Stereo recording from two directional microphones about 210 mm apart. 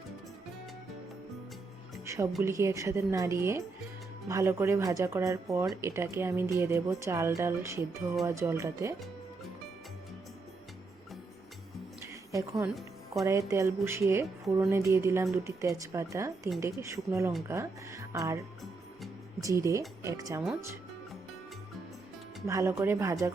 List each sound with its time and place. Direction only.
2.0 s a woman's voice: 15° right (ahead or behind)
12.3 s speech: 15° right (ahead or behind)
13.2 s speech: centre (ahead or behind)
13.5 s speech: 15° right (ahead or behind)
19.4 s speech: 15° right (ahead or behind)
22.4 s speech: 15° right (ahead or behind)